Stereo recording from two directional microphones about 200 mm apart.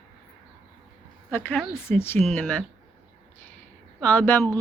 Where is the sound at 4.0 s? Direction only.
10° left (ahead or behind).